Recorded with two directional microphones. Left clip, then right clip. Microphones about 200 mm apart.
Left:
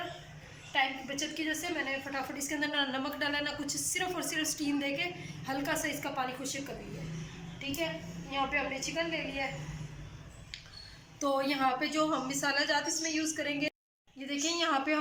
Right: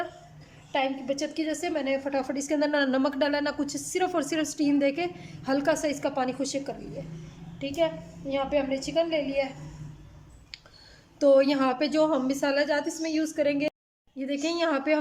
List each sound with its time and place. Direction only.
0.7 s a woman's voice: 50° right (ahead or behind)
8.3 s a woman's voice: 50° right (ahead or behind)
11.2 s a woman's voice: 55° right (ahead or behind)